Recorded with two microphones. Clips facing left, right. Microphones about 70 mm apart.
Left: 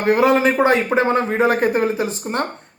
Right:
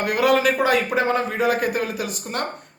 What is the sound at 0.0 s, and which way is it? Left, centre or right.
Speech, left.